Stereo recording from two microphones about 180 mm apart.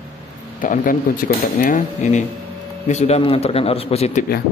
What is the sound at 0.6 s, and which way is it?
Speech, 50° left (ahead or behind).